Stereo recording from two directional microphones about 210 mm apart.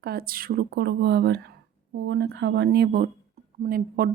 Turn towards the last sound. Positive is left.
turn(degrees=-45)  # may be behind; listen again after turning